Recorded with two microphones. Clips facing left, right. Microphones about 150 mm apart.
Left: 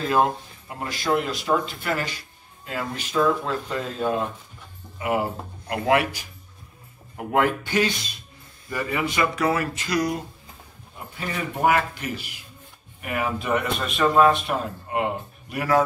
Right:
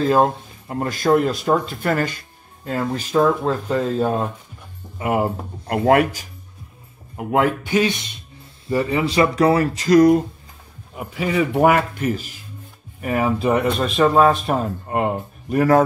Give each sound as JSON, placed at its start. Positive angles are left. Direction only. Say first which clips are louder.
{"t": 0.0, "sound": "speech", "louder": "right 5 dB", "side_deg": -35}
{"t": 0.7, "sound": "speech", "louder": "right 7 dB", "side_deg": -45}
{"t": 7.2, "sound": "speech", "louder": "right 3 dB", "side_deg": -20}
{"t": 11.0, "sound": "speech", "louder": "right 10 dB", "side_deg": -85}
{"t": 12.1, "sound": "speech", "louder": "right 8 dB", "side_deg": -40}